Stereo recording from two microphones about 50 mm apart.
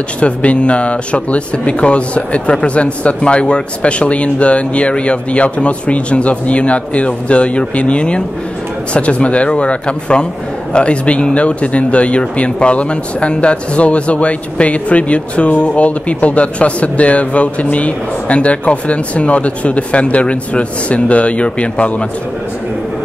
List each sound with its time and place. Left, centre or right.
0.2 s speech: left